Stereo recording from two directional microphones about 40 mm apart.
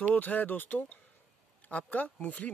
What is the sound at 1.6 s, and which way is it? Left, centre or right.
Speech, left.